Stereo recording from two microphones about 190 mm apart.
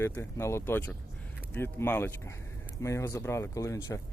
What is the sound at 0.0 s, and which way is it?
Speech, 15° left (ahead or behind).